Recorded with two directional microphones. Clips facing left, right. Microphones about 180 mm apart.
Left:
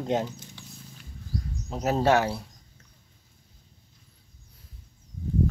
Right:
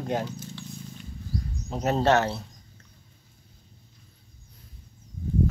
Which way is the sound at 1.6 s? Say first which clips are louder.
Even; centre (ahead or behind).